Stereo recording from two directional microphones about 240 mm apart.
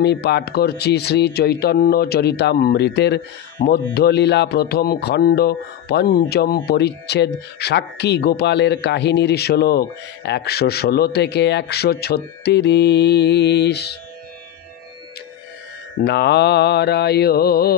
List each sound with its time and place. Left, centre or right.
0.0 s speech: left
16.0 s speech: left